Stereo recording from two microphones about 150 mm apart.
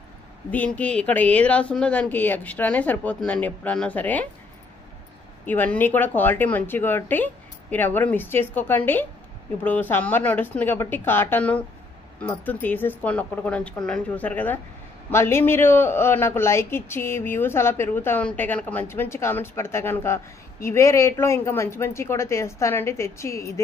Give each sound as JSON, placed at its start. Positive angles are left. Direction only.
{"t": 0.7, "sound": "speech", "side_deg": 10}
{"t": 5.4, "sound": "speech", "side_deg": 10}